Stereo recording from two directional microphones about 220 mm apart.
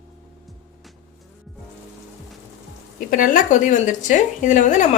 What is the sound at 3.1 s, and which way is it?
Speech, 35° left (ahead or behind).